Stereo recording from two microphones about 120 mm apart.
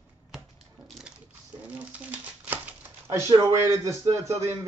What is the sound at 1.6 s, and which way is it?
Speech, 10° right (ahead or behind).